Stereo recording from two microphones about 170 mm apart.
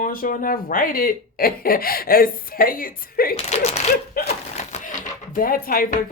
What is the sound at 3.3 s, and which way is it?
Speech, 40° left (ahead or behind).